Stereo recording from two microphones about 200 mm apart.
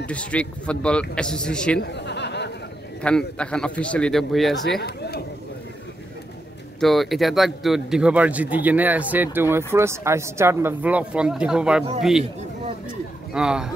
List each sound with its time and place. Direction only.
0.0 s a man's voice: 5° left (ahead or behind)
1.8 s a sound: 60° left (ahead or behind)
3.0 s a man's voice: 5° left (ahead or behind)
4.8 s speech: 50° left (ahead or behind)
6.8 s a man's voice: centre (ahead or behind)
13.3 s a man's voice: 5° right (ahead or behind)